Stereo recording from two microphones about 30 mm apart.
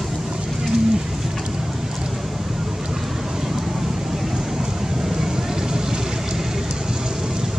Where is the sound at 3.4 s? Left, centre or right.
Centre.